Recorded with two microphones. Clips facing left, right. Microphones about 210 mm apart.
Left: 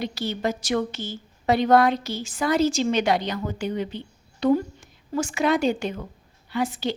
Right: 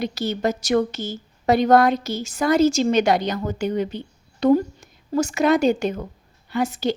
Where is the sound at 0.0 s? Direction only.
45° right (ahead or behind).